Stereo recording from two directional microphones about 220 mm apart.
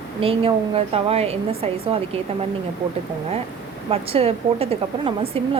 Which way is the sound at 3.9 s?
25° right (ahead or behind).